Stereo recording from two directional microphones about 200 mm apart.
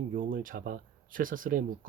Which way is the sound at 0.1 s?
45° right (ahead or behind).